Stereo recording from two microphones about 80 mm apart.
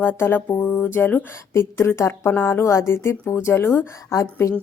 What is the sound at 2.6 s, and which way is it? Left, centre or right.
A woman's voice, left.